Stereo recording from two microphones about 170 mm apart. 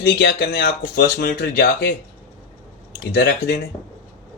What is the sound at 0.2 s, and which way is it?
Speech, 70° left (ahead or behind).